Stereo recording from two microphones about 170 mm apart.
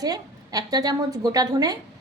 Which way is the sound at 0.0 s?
20° right (ahead or behind).